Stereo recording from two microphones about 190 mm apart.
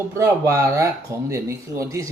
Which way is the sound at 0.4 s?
15° right (ahead or behind).